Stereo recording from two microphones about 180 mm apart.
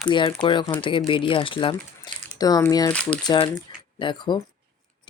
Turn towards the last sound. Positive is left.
turn(degrees=25)  # may be behind; listen again after turning